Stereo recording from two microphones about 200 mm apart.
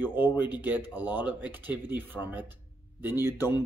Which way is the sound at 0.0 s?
10° right (ahead or behind).